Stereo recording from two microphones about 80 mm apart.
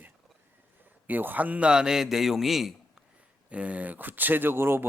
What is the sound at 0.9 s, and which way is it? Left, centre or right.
A man's voice, right.